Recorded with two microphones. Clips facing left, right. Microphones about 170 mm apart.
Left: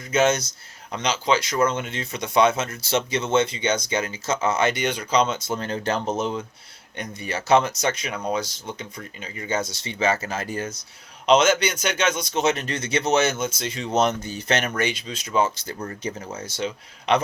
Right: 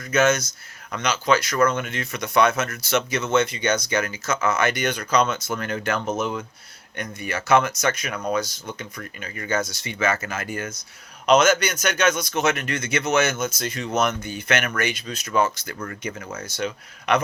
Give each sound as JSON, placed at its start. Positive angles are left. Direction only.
{"t": 0.0, "sound": "speech", "side_deg": 25}